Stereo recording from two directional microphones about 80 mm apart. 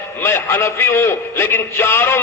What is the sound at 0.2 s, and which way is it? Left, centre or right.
A man's voice, left.